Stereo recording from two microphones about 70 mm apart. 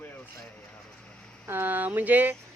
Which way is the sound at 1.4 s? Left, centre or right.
Right.